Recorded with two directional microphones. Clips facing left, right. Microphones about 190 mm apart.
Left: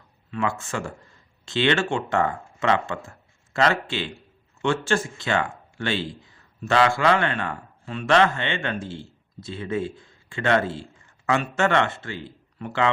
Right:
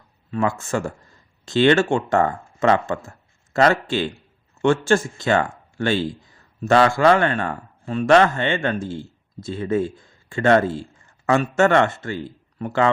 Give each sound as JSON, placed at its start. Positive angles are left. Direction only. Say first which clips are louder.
{"t": 0.3, "sound": "speech", "louder": "right 5 dB", "side_deg": -40}